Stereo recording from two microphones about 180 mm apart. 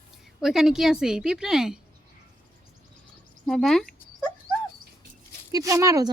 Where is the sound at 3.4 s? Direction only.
Centre (ahead or behind).